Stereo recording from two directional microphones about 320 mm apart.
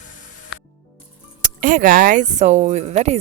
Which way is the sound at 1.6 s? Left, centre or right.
Right.